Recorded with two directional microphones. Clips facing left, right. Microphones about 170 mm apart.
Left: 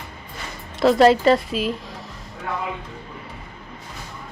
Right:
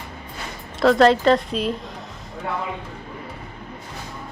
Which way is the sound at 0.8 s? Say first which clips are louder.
Left 1 dB; 5° left (ahead or behind).